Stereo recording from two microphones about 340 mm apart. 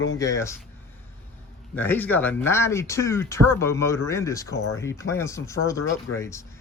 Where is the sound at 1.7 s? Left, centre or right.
Centre.